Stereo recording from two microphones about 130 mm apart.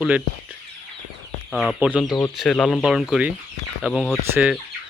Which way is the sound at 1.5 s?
Centre (ahead or behind).